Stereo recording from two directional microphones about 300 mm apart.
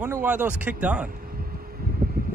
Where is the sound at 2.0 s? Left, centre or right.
Right.